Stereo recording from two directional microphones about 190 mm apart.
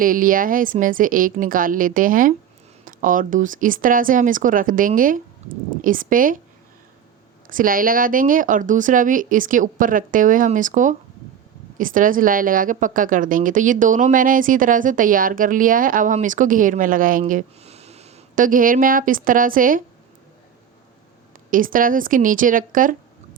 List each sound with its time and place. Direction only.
0.0 s speech: 45° right (ahead or behind)
7.4 s speech: 45° right (ahead or behind)
21.5 s speech: 45° right (ahead or behind)